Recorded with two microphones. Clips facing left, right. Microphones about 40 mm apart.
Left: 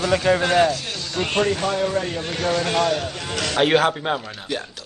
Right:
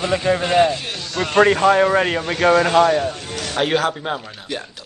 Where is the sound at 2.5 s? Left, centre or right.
Right.